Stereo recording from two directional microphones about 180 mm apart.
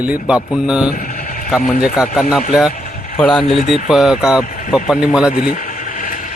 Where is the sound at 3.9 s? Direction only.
5° right (ahead or behind).